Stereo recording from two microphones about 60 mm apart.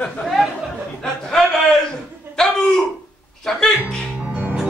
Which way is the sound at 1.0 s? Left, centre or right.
Centre.